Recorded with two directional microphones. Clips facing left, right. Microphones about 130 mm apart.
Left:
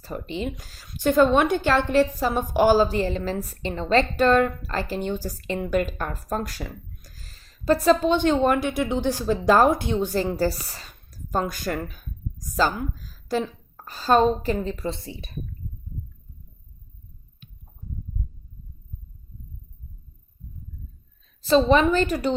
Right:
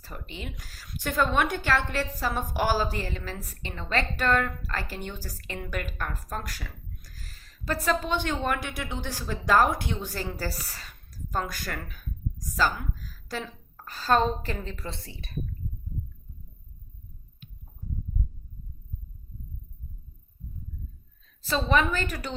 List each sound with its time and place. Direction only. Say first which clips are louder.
0.0 s a woman's voice: left 11 dB; 25° left (ahead or behind)
21.4 s a woman's voice: left 8 dB; 25° left (ahead or behind)